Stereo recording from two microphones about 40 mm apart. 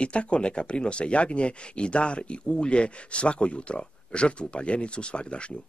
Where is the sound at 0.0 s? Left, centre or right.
Left.